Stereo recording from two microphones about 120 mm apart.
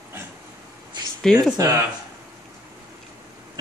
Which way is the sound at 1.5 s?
30° right (ahead or behind).